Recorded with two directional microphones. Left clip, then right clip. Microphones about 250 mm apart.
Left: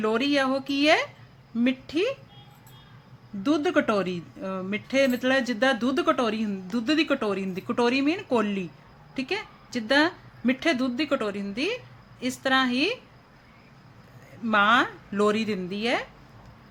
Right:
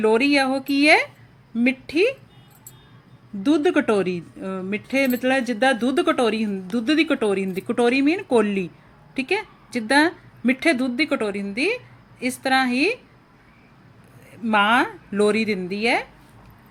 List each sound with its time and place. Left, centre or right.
0.0 s speech: centre
3.4 s speech: centre
14.4 s speech: centre